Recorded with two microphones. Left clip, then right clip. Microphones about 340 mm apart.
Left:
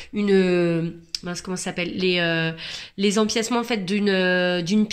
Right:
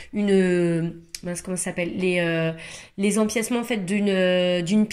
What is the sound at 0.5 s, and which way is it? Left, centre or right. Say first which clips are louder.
Speech: left 1 dB; left.